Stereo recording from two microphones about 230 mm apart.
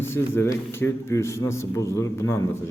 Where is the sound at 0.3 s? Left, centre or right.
Centre.